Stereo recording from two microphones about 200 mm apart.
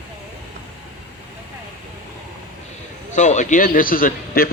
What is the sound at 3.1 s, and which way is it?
A man's voice, 35° left (ahead or behind).